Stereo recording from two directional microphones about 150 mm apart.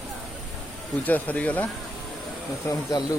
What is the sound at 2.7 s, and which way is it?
Speech, 25° left (ahead or behind).